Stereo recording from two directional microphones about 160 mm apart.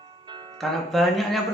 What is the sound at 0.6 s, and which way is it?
Speech, centre (ahead or behind).